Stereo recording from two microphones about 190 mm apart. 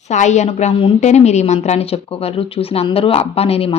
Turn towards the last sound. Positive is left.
turn(degrees=30)  # may be behind; listen again after turning